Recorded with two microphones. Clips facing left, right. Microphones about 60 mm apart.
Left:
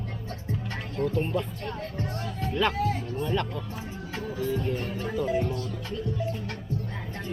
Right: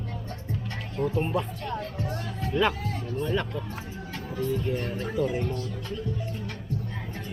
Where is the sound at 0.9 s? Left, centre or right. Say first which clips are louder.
Right 1 dB; centre.